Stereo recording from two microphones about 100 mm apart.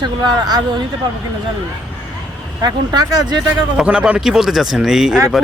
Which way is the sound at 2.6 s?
40° right (ahead or behind).